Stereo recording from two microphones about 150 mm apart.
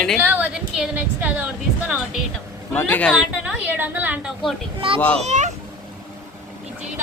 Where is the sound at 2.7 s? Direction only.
10° left (ahead or behind).